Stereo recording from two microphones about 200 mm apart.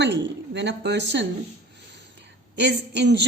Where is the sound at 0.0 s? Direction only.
60° right (ahead or behind).